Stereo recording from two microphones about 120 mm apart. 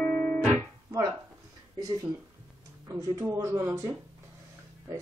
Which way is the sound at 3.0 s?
30° right (ahead or behind).